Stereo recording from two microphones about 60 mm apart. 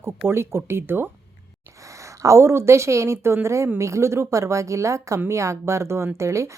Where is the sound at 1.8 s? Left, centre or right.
Right.